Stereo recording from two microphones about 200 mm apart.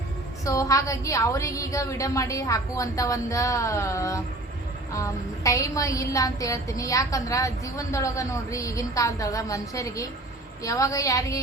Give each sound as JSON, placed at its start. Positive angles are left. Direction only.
{"t": 0.4, "sound": "a woman's voice", "side_deg": 15}